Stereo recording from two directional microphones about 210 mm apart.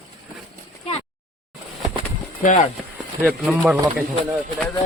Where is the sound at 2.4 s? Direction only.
40° left (ahead or behind).